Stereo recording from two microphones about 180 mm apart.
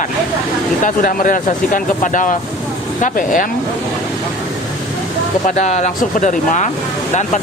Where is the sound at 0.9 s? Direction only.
45° left (ahead or behind).